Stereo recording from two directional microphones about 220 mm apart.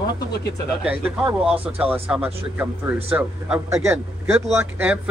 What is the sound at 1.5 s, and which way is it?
Speech, 25° right (ahead or behind).